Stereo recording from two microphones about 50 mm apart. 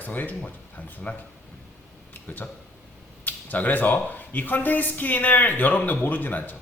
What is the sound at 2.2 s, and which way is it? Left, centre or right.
Speech, left.